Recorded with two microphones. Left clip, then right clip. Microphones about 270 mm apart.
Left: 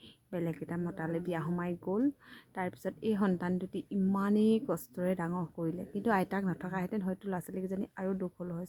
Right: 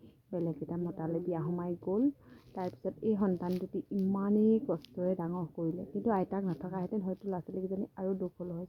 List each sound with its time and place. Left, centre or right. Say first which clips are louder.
0.3 s speech: right 1 dB; centre